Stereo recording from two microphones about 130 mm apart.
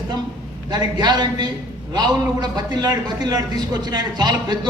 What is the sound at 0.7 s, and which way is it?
A man's voice, 30° right (ahead or behind).